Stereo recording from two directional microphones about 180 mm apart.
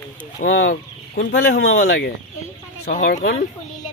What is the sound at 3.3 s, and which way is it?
Speech, 45° left (ahead or behind).